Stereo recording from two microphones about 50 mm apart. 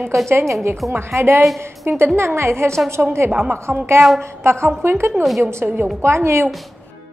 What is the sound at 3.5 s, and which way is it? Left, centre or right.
A woman's voice, right.